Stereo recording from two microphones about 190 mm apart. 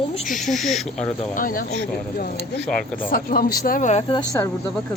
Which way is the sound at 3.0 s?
50° left (ahead or behind).